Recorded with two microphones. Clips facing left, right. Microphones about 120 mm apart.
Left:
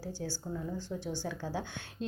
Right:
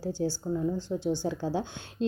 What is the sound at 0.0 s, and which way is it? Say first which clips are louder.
A woman's voice: right 9 dB; 25° right (ahead or behind).